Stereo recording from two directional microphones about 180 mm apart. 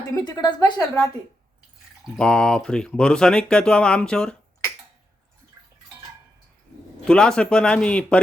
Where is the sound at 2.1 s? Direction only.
5° left (ahead or behind).